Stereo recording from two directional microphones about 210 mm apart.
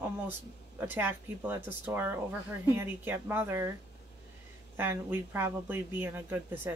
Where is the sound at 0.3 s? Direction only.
10° right (ahead or behind).